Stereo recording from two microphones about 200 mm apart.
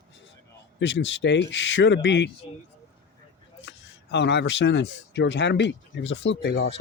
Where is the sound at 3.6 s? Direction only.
60° left (ahead or behind).